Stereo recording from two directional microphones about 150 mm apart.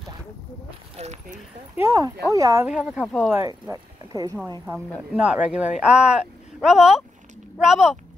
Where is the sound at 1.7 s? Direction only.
20° right (ahead or behind).